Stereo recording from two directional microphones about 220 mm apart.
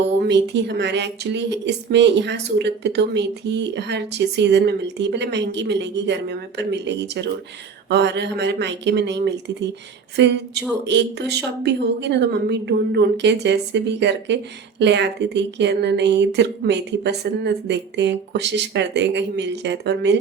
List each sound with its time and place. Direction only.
0.2 s speech: 50° right (ahead or behind)